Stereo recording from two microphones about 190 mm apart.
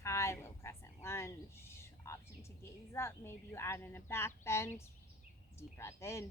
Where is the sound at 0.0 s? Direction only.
15° left (ahead or behind).